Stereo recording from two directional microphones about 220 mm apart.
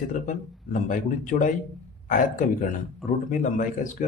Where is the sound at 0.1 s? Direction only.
35° left (ahead or behind).